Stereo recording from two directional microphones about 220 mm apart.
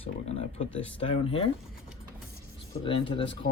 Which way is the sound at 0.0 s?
25° left (ahead or behind).